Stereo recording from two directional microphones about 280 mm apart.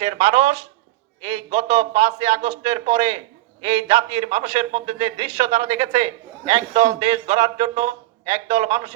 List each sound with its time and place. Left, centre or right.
0.0 s a man's voice: right